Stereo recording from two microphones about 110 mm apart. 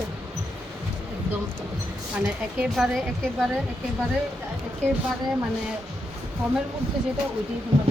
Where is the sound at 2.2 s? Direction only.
5° right (ahead or behind).